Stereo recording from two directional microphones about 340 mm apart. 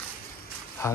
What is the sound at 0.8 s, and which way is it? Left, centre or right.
Speech, centre.